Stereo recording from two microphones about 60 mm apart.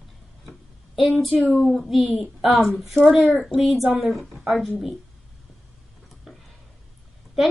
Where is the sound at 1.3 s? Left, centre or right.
Left.